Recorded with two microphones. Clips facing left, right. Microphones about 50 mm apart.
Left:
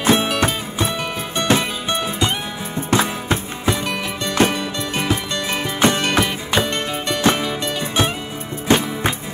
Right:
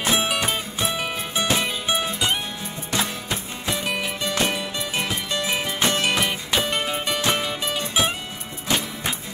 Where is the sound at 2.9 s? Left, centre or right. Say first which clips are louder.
Left 8 dB; left.